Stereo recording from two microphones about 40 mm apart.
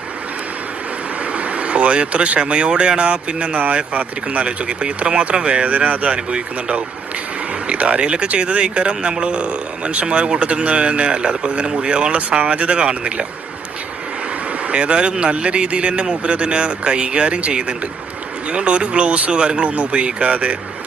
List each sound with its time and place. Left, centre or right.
1.2 s speech: right
12.1 s speech: right
14.7 s speech: right